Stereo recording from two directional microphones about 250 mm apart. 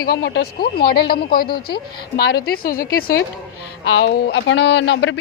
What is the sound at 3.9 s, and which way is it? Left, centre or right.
A man's voice, left.